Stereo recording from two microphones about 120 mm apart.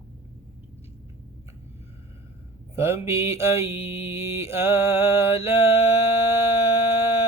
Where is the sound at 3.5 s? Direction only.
60° left (ahead or behind).